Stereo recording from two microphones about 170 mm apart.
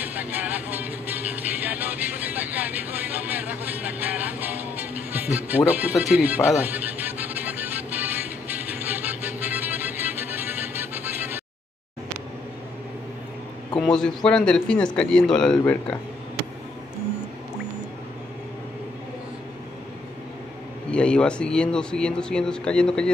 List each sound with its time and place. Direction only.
0.0 s music: 10° right (ahead or behind)
5.7 s speech: 10° right (ahead or behind)
6.6 s music: 10° right (ahead or behind)
13.7 s a man's voice: 5° left (ahead or behind)
20.9 s a man's voice: 5° left (ahead or behind)